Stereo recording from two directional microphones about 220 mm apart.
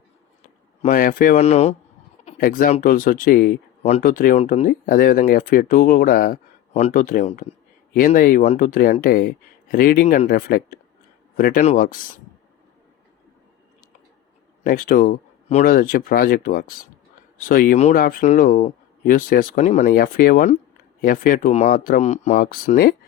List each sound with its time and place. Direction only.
0.9 s speech: 40° left (ahead or behind)
14.6 s speech: 40° left (ahead or behind)